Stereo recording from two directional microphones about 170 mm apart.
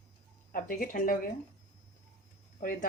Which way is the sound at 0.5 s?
55° left (ahead or behind).